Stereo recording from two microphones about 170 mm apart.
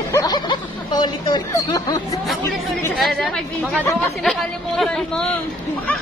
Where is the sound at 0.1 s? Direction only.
20° left (ahead or behind).